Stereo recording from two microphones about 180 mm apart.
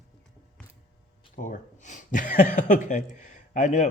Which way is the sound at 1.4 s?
45° left (ahead or behind).